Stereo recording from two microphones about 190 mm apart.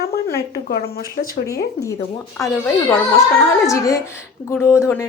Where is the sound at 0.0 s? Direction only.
55° left (ahead or behind).